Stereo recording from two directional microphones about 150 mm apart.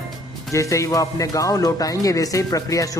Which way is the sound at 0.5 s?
20° left (ahead or behind).